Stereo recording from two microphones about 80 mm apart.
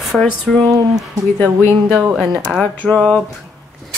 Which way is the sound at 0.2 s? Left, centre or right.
Centre.